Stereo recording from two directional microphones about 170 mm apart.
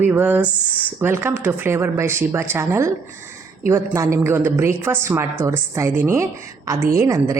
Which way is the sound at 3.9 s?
15° right (ahead or behind).